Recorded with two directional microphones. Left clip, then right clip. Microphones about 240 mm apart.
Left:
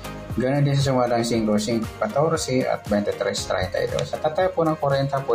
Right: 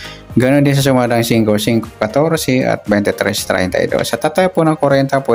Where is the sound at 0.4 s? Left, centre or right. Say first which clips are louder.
Right 11 dB; right.